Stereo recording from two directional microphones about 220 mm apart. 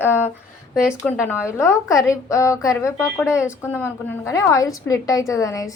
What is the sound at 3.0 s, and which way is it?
Speech, 5° right (ahead or behind).